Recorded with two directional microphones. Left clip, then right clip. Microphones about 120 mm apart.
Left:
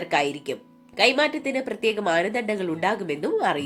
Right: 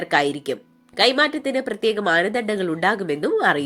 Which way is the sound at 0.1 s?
40° right (ahead or behind).